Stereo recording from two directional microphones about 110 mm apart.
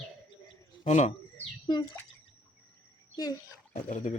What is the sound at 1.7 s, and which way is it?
Speech, 40° left (ahead or behind).